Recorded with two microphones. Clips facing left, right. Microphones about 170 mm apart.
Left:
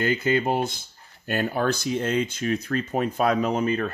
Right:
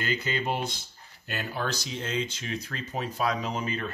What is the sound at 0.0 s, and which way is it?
Speech, 50° left (ahead or behind).